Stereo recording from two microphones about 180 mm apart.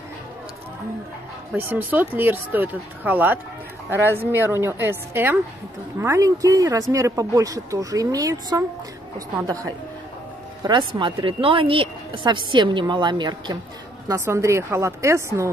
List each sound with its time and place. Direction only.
1.6 s a woman's voice: 10° right (ahead or behind)